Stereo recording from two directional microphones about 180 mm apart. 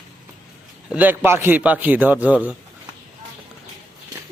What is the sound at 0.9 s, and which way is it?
A man's voice, 10° right (ahead or behind).